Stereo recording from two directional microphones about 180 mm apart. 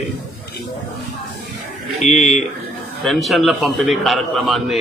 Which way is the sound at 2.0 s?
40° left (ahead or behind).